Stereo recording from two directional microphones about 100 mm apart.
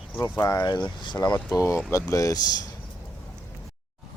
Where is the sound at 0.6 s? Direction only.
45° left (ahead or behind).